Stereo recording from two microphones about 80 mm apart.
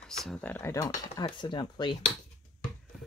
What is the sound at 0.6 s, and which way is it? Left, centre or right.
Speech, left.